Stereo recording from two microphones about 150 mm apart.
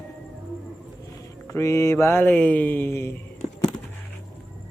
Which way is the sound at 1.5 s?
20° left (ahead or behind).